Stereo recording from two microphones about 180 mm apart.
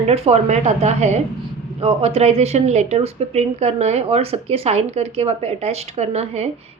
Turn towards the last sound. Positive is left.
turn(degrees=-35)  # may be behind; listen again after turning